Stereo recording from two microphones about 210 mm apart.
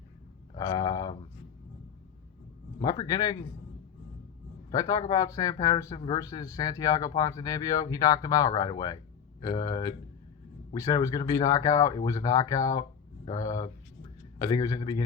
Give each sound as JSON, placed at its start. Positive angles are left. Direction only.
{"t": 0.5, "sound": "a sound", "side_deg": 20}
{"t": 2.8, "sound": "speech", "side_deg": 15}
{"t": 4.7, "sound": "a man's voice", "side_deg": 15}